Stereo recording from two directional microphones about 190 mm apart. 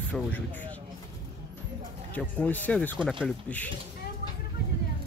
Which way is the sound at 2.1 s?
10° left (ahead or behind).